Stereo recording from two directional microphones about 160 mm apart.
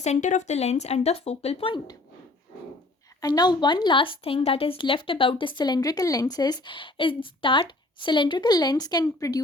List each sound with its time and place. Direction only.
0.0 s speech: 50° left (ahead or behind); by 2.0 s 30° left (ahead or behind)
3.2 s a woman's voice: 25° left (ahead or behind)